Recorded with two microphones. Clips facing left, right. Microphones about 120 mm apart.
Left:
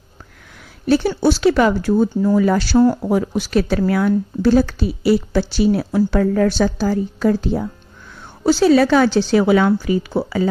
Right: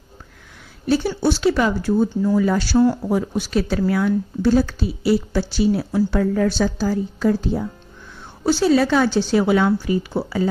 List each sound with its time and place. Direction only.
0.8 s speech: 75° left (ahead or behind)
2.2 s speech: 65° left (ahead or behind)
8.5 s speech: 85° left